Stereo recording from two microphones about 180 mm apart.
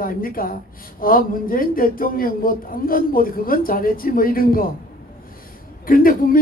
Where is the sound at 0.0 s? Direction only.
50° left (ahead or behind).